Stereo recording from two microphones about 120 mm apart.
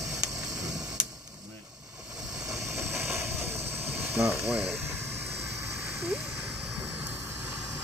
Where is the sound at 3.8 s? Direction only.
15° right (ahead or behind).